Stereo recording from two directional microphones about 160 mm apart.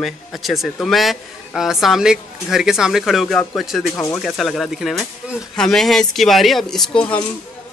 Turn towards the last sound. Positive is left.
turn(degrees=5)  # may be behind; listen again after turning